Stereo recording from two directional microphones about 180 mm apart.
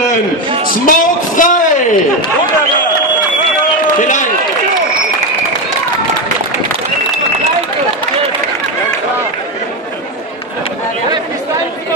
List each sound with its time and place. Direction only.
0.8 s a man's voice: 45° left (ahead or behind)
4.0 s a man's voice: 45° left (ahead or behind)